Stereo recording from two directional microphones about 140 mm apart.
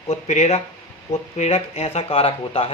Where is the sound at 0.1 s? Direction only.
50° left (ahead or behind).